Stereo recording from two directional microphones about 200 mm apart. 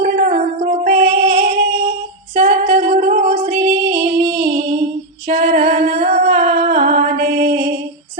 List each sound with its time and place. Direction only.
0.0 s music: 40° right (ahead or behind)
3.9 s music: 25° right (ahead or behind)
5.3 s music: 45° right (ahead or behind)